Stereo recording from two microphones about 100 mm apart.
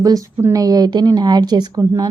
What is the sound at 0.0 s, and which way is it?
A woman's voice, 35° right (ahead or behind).